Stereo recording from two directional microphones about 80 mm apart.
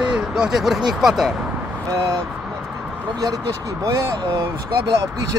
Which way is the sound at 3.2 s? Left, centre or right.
Right.